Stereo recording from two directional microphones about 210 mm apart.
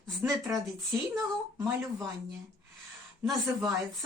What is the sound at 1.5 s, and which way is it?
Speech, 15° right (ahead or behind).